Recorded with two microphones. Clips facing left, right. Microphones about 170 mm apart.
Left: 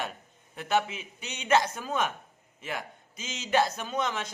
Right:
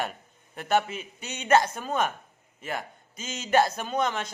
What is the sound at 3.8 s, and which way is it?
Speech, 35° right (ahead or behind).